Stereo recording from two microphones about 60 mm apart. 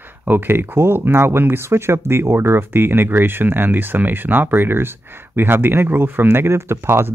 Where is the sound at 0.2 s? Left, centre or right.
Right.